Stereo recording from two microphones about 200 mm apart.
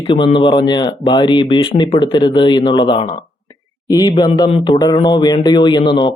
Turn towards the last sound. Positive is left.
turn(degrees=25)  # may be behind; listen again after turning